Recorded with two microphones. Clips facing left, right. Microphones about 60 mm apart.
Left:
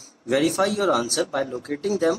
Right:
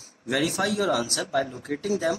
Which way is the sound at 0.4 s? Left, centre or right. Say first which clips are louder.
Left 4 dB; left.